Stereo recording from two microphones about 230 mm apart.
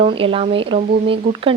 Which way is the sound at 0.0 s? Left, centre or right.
Right.